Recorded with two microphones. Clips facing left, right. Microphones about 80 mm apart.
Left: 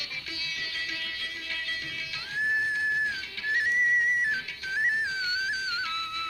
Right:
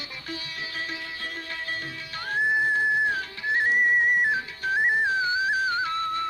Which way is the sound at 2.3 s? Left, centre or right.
Right.